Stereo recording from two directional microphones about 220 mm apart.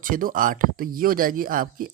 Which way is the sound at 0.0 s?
40° right (ahead or behind).